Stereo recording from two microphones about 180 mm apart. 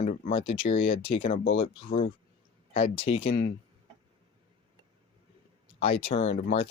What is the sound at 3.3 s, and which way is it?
Speech, 50° left (ahead or behind).